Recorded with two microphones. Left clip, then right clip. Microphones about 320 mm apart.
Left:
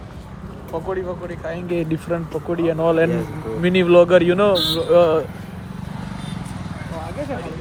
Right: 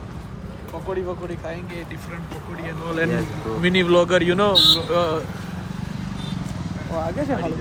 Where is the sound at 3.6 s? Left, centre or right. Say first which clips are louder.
Left 4 dB; centre.